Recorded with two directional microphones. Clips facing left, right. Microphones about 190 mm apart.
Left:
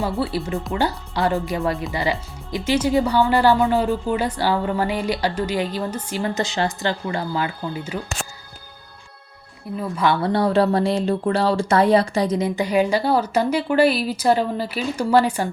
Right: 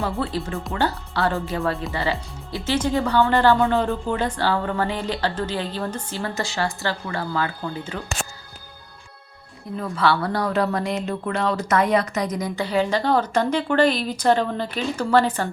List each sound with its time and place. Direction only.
0.0 s a woman's voice: 10° left (ahead or behind)
9.7 s a woman's voice: 10° left (ahead or behind)
10.2 s speech: 25° left (ahead or behind)
12.5 s a woman's voice: 15° left (ahead or behind)